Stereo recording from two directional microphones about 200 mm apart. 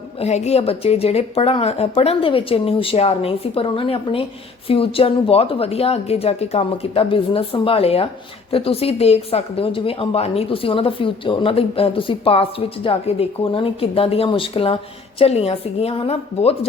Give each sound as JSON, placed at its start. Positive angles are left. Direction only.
{"t": 0.2, "sound": "a woman's voice", "side_deg": 35}